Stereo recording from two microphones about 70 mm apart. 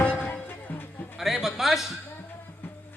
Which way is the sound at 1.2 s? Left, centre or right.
Centre.